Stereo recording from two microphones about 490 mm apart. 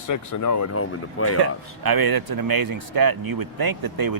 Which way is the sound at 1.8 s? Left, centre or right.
Right.